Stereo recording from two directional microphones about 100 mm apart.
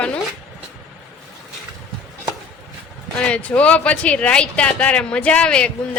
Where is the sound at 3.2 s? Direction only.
10° left (ahead or behind).